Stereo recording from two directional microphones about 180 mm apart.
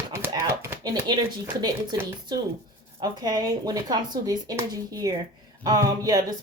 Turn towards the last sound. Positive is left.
turn(degrees=-20)  # may be behind; listen again after turning